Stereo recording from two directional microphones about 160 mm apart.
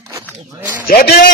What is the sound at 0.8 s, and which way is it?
Speech, 70° left (ahead or behind).